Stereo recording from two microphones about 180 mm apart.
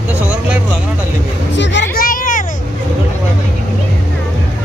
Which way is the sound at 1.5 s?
80° left.